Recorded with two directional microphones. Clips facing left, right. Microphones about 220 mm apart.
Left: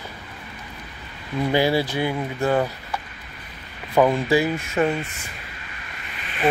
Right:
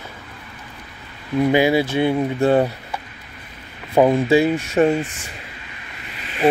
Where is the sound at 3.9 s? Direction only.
20° right (ahead or behind).